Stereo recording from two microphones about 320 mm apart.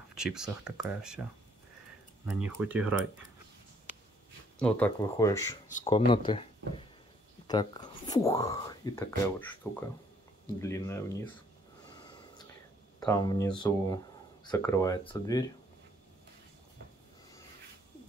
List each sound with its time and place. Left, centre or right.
0.1 s speech: centre
2.2 s speech: centre
4.6 s speech: centre
13.0 s speech: centre